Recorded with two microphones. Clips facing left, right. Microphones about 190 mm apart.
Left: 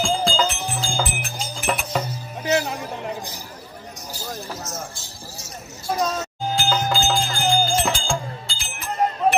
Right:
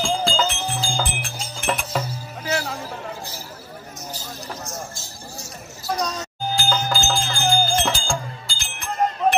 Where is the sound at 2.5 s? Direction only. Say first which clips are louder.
Left 4 dB; 20° left (ahead or behind).